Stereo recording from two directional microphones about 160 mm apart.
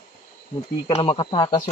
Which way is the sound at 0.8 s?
35° left (ahead or behind).